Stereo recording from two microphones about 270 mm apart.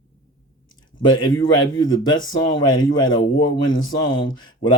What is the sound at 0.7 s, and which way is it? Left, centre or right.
Speech, centre.